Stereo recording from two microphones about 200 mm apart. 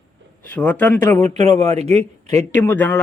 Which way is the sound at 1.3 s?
35° right (ahead or behind).